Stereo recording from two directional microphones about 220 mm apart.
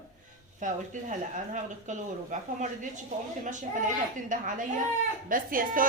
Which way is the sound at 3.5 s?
35° right (ahead or behind).